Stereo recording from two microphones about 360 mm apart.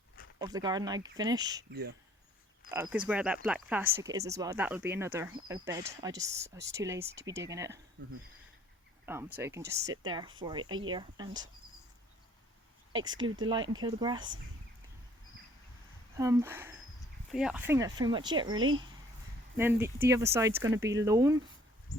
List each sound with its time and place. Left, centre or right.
0.3 s speech: centre
1.7 s speech: right
2.6 s speech: centre
9.0 s speech: centre
12.9 s speech: centre
16.1 s speech: centre